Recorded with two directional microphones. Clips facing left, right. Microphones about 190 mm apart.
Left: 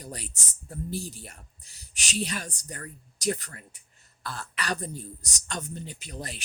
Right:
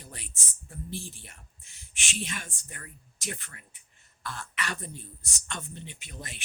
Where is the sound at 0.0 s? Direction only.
40° left (ahead or behind).